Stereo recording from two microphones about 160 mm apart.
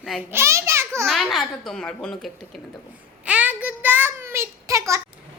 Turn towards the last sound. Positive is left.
turn(degrees=-20)  # may be behind; listen again after turning